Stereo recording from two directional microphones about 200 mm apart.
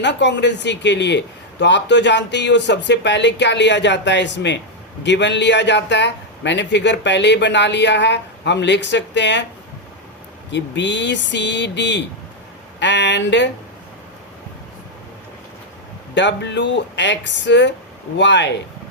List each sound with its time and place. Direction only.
0.0 s a man's voice: 60° left (ahead or behind)
10.5 s a man's voice: 60° left (ahead or behind)
16.1 s a man's voice: 65° left (ahead or behind)